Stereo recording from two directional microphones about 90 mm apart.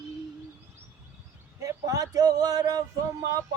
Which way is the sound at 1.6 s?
40° right (ahead or behind).